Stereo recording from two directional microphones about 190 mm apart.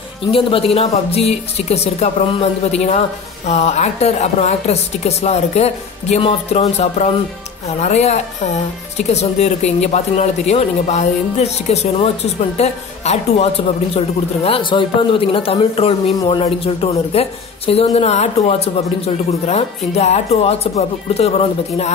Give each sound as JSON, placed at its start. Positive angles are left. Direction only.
{"t": 0.3, "sound": "speech", "side_deg": 30}